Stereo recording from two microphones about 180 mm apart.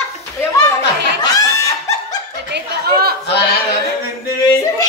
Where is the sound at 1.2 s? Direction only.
20° left (ahead or behind).